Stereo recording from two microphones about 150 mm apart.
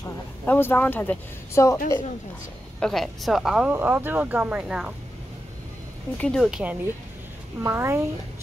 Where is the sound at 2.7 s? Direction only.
5° left (ahead or behind).